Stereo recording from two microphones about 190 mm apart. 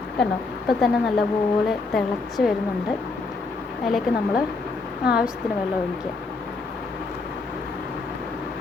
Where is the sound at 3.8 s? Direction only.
Centre (ahead or behind).